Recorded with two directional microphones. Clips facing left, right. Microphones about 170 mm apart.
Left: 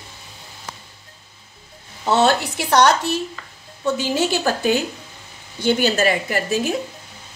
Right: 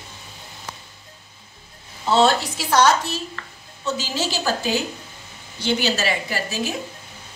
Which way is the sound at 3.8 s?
55° left (ahead or behind).